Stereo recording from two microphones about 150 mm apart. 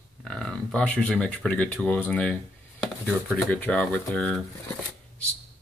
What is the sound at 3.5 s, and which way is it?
Speech, 5° left (ahead or behind).